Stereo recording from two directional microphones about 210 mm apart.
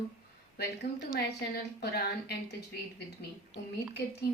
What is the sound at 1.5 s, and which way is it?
A woman's voice, 50° left (ahead or behind).